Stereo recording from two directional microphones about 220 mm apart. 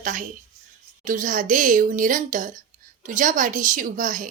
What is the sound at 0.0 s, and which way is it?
A woman's voice, 35° right (ahead or behind).